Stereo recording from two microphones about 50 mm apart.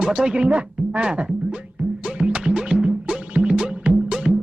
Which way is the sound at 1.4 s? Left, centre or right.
Right.